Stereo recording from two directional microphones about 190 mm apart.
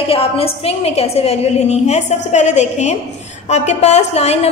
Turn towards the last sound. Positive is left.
turn(degrees=35)  # may be behind; listen again after turning